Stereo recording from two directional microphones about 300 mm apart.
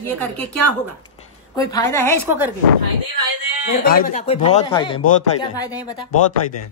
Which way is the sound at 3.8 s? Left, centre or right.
Left.